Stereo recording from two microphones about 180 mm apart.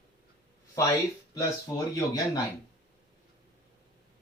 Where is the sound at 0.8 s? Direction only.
20° left (ahead or behind).